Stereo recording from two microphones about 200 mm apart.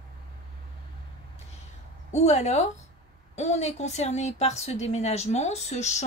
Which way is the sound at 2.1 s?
35° left (ahead or behind).